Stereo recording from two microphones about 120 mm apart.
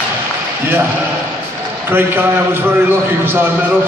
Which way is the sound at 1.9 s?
20° right (ahead or behind).